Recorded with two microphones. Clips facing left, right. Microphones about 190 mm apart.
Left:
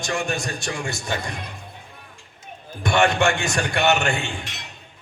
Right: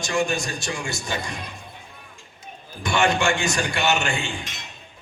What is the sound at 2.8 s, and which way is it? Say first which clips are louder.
A man's voice: left 2 dB; 60° left (ahead or behind).